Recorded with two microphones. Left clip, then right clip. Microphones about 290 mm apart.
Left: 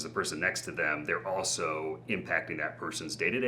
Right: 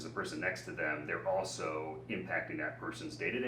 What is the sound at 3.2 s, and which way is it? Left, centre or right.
Speech, left.